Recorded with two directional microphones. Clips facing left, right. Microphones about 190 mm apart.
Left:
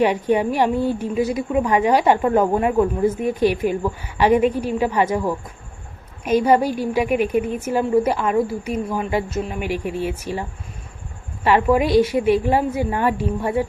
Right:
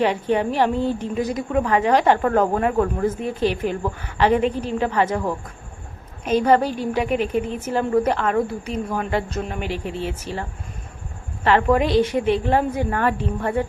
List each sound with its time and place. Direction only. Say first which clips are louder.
0.0 s a woman's voice: left 2 dB; 15° left (ahead or behind)
11.4 s a woman's voice: left 1 dB; 10° left (ahead or behind)